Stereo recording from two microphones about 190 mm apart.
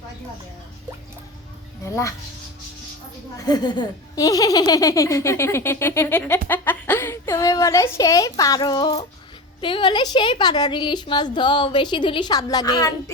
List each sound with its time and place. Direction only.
1.8 s speech: 15° left (ahead or behind)
3.3 s a woman's voice: 20° left (ahead or behind)